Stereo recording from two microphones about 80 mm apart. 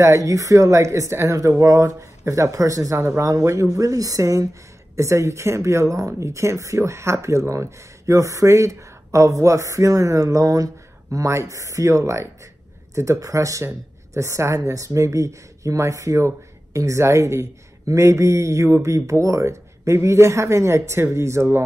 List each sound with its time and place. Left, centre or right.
0.0 s a woman's voice: right